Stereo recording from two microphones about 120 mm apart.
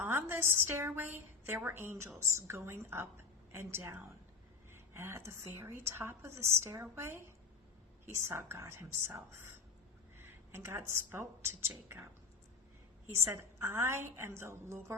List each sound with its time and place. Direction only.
0.0 s a woman's voice: 20° right (ahead or behind)
13.1 s a woman's voice: 25° right (ahead or behind)